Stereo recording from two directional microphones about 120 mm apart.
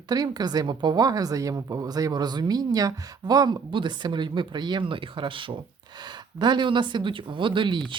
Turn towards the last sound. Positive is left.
turn(degrees=-40)  # may be behind; listen again after turning